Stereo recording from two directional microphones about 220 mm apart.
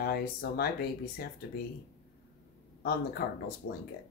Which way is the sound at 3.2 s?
45° left (ahead or behind).